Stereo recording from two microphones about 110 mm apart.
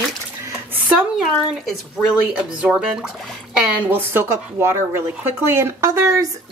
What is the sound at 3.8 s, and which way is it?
Speech, 20° right (ahead or behind).